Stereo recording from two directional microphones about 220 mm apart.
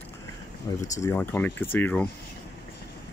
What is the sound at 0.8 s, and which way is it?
Speech, 15° left (ahead or behind).